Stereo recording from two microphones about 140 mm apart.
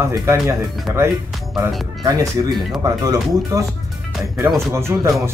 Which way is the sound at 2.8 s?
25° right (ahead or behind).